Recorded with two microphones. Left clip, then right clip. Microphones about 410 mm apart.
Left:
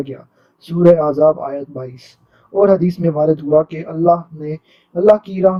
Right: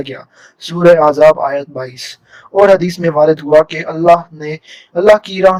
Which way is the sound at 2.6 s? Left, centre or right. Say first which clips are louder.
Right 5 dB; right.